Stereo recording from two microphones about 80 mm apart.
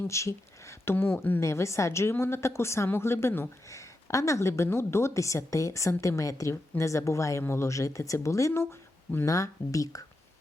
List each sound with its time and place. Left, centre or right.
0.1 s speech: left
1.4 s a woman's voice: left